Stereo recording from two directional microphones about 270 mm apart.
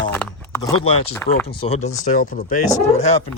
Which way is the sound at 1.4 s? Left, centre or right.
Left.